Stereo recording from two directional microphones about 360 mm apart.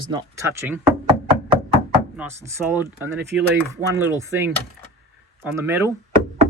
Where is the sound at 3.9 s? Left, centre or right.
Centre.